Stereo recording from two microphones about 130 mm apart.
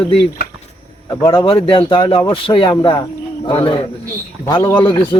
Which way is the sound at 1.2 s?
35° left (ahead or behind).